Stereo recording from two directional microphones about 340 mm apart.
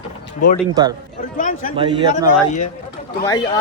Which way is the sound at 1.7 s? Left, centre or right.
Centre.